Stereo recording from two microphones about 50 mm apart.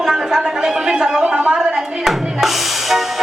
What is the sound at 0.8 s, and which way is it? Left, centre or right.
Speech, centre.